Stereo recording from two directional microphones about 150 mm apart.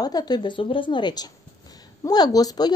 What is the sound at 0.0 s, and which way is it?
Speech, 25° left (ahead or behind).